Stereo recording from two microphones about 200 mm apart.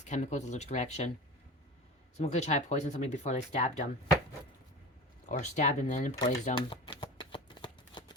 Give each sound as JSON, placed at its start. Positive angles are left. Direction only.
{"t": 0.0, "sound": "speech", "side_deg": 35}
{"t": 2.1, "sound": "speech", "side_deg": 35}
{"t": 5.2, "sound": "speech", "side_deg": 35}
{"t": 6.4, "sound": "shuffling cards", "side_deg": 25}